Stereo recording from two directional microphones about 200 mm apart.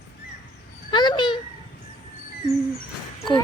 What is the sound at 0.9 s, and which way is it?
Speech, 20° left (ahead or behind).